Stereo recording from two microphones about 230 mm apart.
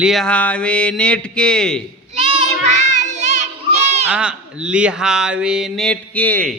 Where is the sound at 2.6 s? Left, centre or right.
Right.